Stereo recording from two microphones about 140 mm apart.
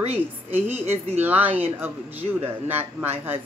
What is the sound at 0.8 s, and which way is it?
Speech, 50° right (ahead or behind).